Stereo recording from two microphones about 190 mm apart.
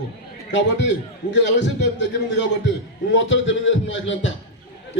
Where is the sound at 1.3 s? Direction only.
70° left (ahead or behind).